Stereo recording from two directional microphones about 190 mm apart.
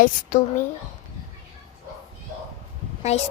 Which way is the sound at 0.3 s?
45° left (ahead or behind).